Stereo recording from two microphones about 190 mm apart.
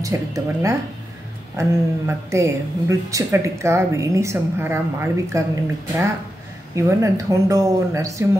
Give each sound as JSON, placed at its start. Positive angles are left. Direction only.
{"t": 0.0, "sound": "a woman's voice", "side_deg": -15}
{"t": 6.7, "sound": "a woman's voice", "side_deg": -15}